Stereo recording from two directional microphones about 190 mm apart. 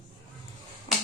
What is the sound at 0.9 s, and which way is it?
Finger snapping, 25° left (ahead or behind).